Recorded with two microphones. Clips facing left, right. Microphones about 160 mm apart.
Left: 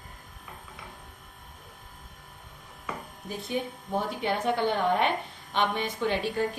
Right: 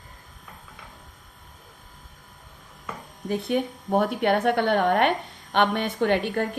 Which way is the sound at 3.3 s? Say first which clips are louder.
Right 7 dB; 60° right (ahead or behind).